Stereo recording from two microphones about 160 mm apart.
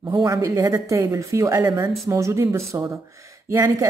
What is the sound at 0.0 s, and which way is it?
A woman's voice, 25° right (ahead or behind).